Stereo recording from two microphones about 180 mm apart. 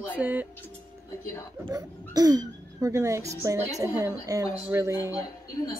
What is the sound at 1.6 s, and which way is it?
Speech, 20° right (ahead or behind).